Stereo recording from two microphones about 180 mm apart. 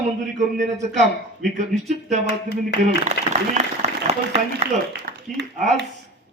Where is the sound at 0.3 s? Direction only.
40° right (ahead or behind).